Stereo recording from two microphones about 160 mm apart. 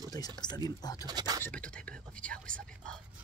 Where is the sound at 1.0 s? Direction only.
25° right (ahead or behind).